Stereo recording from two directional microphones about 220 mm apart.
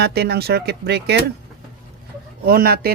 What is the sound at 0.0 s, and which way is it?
Speech, 45° right (ahead or behind).